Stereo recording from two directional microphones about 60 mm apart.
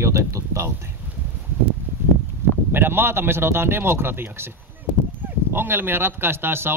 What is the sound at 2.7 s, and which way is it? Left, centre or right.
Speech, right.